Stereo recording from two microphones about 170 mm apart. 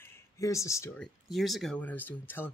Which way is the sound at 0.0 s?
15° left (ahead or behind).